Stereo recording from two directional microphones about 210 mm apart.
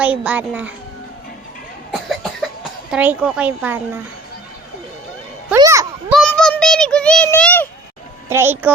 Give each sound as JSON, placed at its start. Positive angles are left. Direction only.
{"t": 0.0, "sound": "speech", "side_deg": -5}
{"t": 1.9, "sound": "cough", "side_deg": 0}
{"t": 2.9, "sound": "speech", "side_deg": -5}
{"t": 5.5, "sound": "a sound", "side_deg": -15}
{"t": 6.1, "sound": "a sound", "side_deg": 0}
{"t": 8.3, "sound": "speech", "side_deg": -10}